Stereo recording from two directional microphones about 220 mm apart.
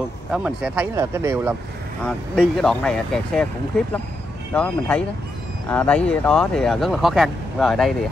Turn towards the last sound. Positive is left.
turn(degrees=0)  # may be behind; listen again after turning